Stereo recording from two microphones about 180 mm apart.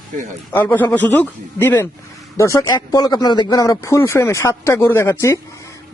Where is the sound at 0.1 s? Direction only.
45° right (ahead or behind).